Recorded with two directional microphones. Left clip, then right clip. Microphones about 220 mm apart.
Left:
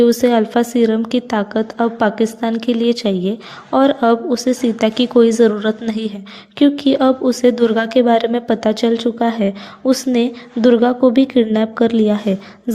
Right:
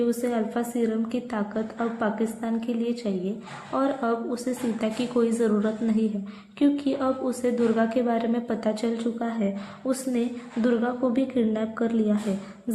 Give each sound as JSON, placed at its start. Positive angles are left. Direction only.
{"t": 0.0, "sound": "a woman's voice", "side_deg": 40}